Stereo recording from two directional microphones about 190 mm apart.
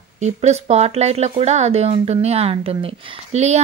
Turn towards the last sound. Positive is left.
turn(degrees=-35)  # may be behind; listen again after turning